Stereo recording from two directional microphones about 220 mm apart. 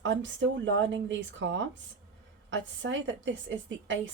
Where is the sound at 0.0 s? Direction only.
55° right (ahead or behind).